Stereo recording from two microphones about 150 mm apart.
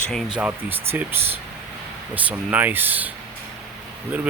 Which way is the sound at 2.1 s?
10° right (ahead or behind).